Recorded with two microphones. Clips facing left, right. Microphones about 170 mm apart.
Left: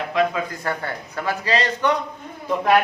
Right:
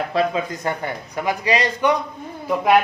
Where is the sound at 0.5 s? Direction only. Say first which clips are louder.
Right 2 dB; 20° right (ahead or behind).